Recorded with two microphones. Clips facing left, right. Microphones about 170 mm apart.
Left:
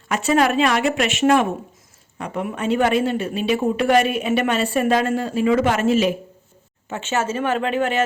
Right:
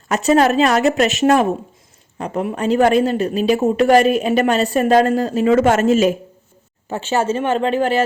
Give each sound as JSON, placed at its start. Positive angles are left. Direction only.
{"t": 0.1, "sound": "speech", "side_deg": -40}